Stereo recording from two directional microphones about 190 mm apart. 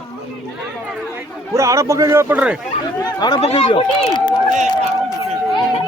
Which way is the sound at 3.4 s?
35° left (ahead or behind).